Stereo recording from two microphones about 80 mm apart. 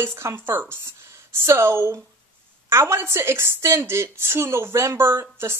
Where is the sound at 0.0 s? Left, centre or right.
Right.